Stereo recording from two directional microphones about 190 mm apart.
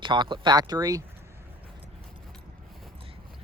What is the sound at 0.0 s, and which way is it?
Speech, 25° right (ahead or behind).